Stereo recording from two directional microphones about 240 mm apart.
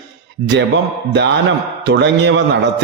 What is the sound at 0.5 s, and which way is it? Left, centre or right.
Speech, right.